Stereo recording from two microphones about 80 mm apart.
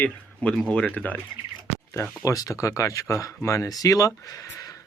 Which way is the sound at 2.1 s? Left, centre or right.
Left.